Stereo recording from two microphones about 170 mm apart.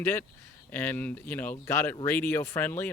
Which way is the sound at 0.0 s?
10° left (ahead or behind).